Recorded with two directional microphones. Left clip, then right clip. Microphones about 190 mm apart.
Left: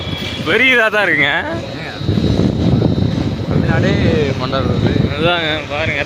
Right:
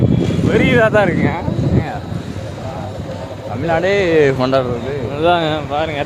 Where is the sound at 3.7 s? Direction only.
55° right (ahead or behind).